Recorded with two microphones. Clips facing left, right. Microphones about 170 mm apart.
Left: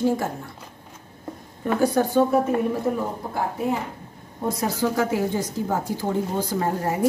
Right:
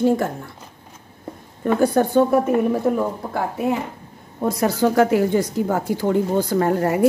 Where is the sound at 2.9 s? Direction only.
65° right (ahead or behind).